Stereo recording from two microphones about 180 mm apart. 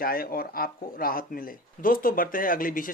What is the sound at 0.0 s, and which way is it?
Speech, 55° left (ahead or behind).